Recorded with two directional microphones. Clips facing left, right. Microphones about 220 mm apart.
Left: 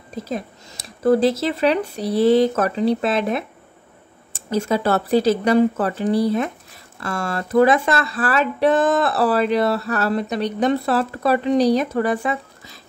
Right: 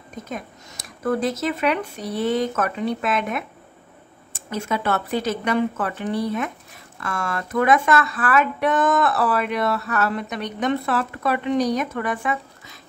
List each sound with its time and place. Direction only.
0.1 s speech: 35° left (ahead or behind)